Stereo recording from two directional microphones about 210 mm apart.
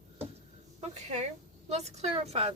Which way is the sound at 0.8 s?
35° right (ahead or behind).